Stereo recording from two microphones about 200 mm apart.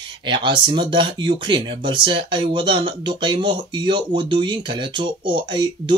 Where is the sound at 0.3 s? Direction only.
25° right (ahead or behind).